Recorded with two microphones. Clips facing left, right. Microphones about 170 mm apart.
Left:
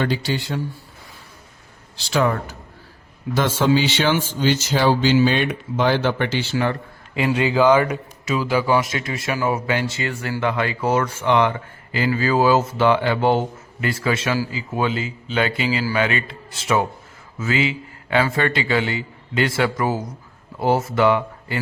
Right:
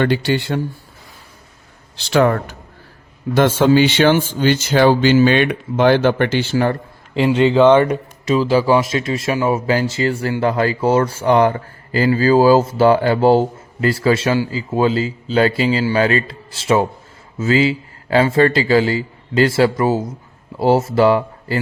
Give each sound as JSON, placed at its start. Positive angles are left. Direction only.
{"t": 0.0, "sound": "speech", "side_deg": -60}
{"t": 2.0, "sound": "speech", "side_deg": -60}
{"t": 7.5, "sound": "speech", "side_deg": -25}